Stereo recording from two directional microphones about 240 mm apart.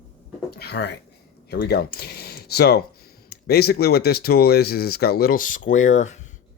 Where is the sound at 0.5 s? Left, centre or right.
Left.